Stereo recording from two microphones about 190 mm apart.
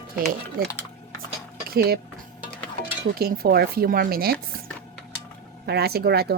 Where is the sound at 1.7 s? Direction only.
55° right (ahead or behind).